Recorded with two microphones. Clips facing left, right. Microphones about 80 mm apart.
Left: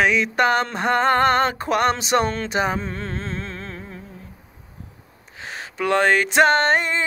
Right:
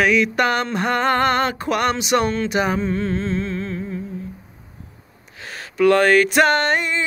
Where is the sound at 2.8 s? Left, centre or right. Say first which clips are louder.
Right 7 dB; left.